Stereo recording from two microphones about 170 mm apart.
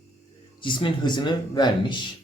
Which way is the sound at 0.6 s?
30° left (ahead or behind).